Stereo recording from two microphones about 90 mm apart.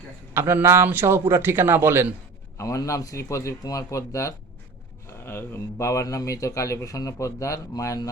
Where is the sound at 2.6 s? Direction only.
35° left (ahead or behind).